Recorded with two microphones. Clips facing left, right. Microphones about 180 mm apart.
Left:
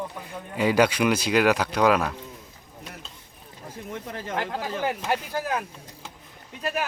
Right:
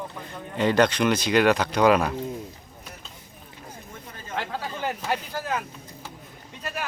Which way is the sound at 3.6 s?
75° left (ahead or behind).